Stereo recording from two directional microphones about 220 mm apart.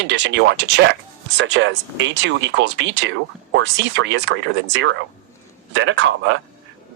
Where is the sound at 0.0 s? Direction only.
50° right (ahead or behind).